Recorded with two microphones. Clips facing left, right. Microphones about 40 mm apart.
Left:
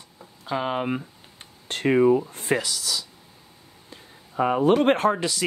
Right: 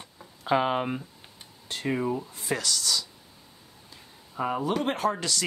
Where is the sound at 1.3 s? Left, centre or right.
Left.